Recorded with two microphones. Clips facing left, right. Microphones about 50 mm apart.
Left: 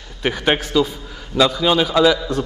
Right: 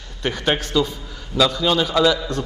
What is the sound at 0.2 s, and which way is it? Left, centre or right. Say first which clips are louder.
A man's voice: left 3 dB; centre.